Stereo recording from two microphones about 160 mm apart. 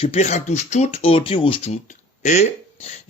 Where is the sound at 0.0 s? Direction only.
40° left (ahead or behind).